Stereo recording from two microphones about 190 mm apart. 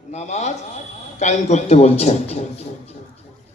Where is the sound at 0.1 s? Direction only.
35° left (ahead or behind).